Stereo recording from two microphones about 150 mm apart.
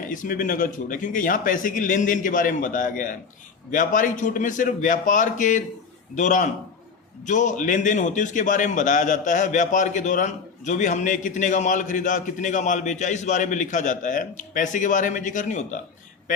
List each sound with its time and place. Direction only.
0.0 s a man's voice: 65° left (ahead or behind)